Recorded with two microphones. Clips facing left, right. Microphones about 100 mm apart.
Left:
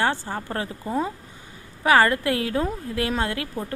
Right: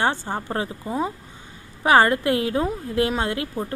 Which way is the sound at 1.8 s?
25° right (ahead or behind).